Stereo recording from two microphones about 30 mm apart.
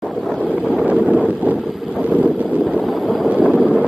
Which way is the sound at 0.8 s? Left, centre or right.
Right.